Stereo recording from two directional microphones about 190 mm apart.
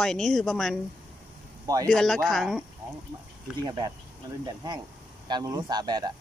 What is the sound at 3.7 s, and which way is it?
Speech, 25° right (ahead or behind).